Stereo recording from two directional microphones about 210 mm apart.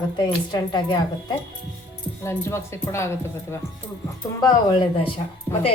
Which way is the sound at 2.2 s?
15° left (ahead or behind).